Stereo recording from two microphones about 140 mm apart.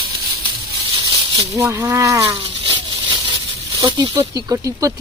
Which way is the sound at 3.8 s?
35° right (ahead or behind).